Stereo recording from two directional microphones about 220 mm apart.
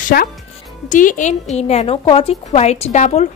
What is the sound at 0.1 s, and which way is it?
A woman's voice, 40° left (ahead or behind).